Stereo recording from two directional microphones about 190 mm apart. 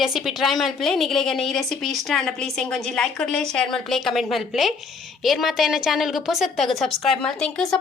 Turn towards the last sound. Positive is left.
turn(degrees=5)  # may be behind; listen again after turning